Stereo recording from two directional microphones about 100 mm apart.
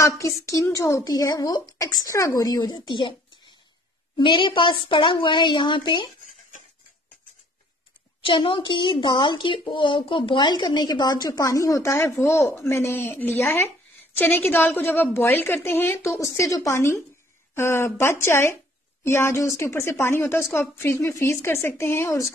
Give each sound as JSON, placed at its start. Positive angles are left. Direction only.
{"t": 0.2, "sound": "speech", "side_deg": 30}
{"t": 4.2, "sound": "a woman's voice", "side_deg": 55}
{"t": 8.2, "sound": "a woman's voice", "side_deg": 60}